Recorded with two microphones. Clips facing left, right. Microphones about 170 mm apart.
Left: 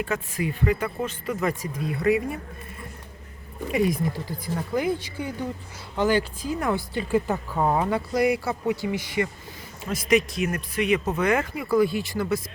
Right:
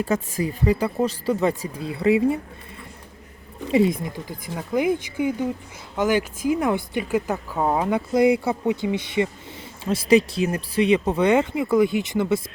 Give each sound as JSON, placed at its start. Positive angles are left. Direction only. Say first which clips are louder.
{"t": 0.0, "sound": "speech", "louder": "right 4 dB", "side_deg": -40}
{"t": 3.7, "sound": "speech", "louder": "right 4 dB", "side_deg": -25}
{"t": 7.3, "sound": "speech", "louder": "right 1 dB", "side_deg": -5}